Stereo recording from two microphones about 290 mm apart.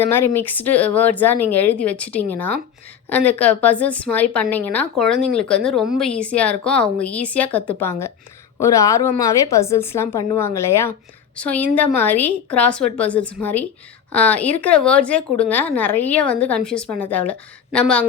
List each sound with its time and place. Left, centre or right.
0.0 s a woman's voice: centre